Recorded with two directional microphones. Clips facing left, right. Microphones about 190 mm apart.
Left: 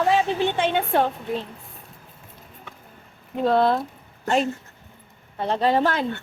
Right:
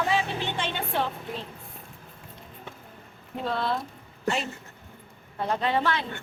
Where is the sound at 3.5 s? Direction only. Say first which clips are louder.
Left 9 dB; 45° left (ahead or behind).